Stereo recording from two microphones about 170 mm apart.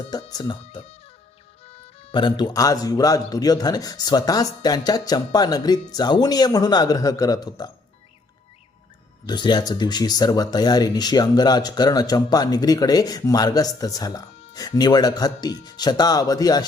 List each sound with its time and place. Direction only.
0.1 s speech: 25° left (ahead or behind)
9.2 s speech: 25° left (ahead or behind)